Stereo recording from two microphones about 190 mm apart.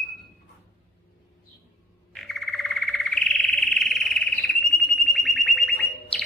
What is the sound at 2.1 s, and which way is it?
Frog, centre (ahead or behind).